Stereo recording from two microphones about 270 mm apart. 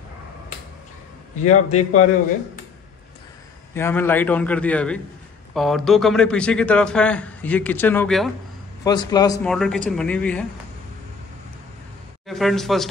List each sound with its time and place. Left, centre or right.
1.7 s a man's voice: left
3.7 s speech: centre
8.8 s a man's voice: centre
9.5 s speech: centre
12.3 s speech: centre